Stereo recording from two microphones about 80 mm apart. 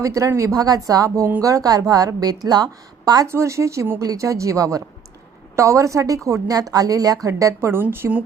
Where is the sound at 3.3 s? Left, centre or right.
Right.